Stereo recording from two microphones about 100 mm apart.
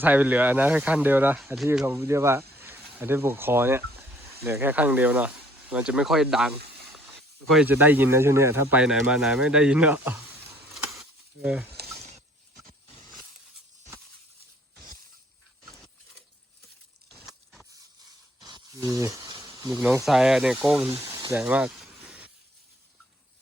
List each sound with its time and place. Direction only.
0.0 s speech: 15° right (ahead or behind)
7.6 s speech: 20° right (ahead or behind)
8.7 s speech: 10° right (ahead or behind)
11.4 s speech: 10° right (ahead or behind)
11.9 s a sound: centre (ahead or behind)
15.6 s a sound: 5° left (ahead or behind)
18.7 s speech: 30° right (ahead or behind)
19.4 s snake: 25° right (ahead or behind)
20.1 s speech: 5° right (ahead or behind)
20.9 s speech: 20° right (ahead or behind)
21.3 s a sound: 15° right (ahead or behind)